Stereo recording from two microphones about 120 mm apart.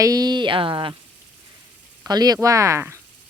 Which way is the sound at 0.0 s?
30° right (ahead or behind).